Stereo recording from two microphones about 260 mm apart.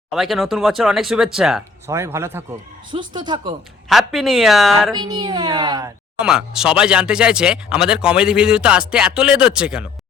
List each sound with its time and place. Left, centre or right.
0.1 s speech: centre
3.8 s speech: centre
4.9 s speech: centre
6.1 s speech: centre